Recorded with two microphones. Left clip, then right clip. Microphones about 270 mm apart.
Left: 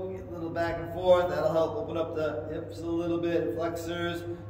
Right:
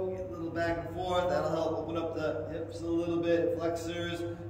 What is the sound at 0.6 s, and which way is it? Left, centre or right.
A man's voice, centre.